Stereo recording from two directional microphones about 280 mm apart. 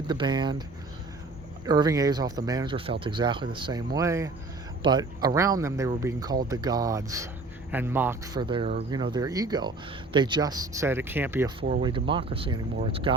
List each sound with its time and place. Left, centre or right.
0.1 s speech: centre
1.6 s speech: centre